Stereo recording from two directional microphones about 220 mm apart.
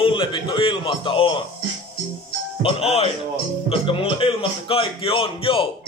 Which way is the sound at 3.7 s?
25° left (ahead or behind).